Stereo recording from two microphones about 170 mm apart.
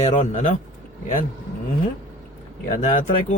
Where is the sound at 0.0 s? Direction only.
45° left (ahead or behind).